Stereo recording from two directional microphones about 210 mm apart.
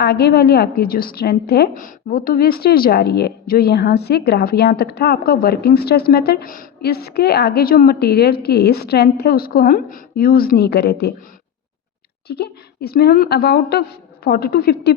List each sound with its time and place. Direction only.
0.0 s a woman's voice: 50° left (ahead or behind)
12.3 s a woman's voice: 50° left (ahead or behind)